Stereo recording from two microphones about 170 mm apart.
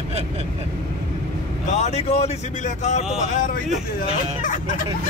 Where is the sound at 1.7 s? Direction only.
40° left (ahead or behind).